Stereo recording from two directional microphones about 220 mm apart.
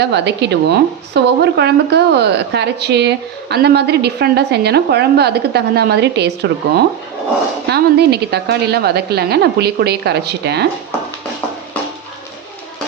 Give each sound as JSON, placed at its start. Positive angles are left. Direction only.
{"t": 0.0, "sound": "a woman's voice", "side_deg": -50}
{"t": 7.7, "sound": "a woman's voice", "side_deg": -50}